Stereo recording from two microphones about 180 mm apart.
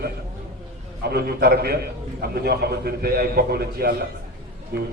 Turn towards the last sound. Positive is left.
turn(degrees=-60)  # may be behind; listen again after turning